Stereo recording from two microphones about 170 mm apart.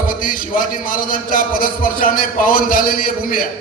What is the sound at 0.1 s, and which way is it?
A man's voice, 55° left (ahead or behind).